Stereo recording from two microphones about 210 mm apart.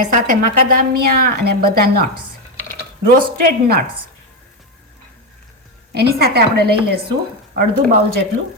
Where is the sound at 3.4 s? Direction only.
45° right (ahead or behind).